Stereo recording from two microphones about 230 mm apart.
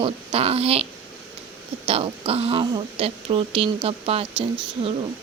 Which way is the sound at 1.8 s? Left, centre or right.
Right.